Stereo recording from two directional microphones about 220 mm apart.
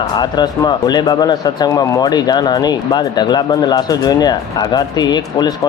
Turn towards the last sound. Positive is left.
turn(degrees=20)  # may be behind; listen again after turning